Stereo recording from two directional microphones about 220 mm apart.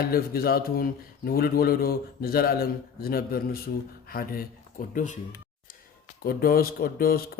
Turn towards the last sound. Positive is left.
turn(degrees=45)  # may be behind; listen again after turning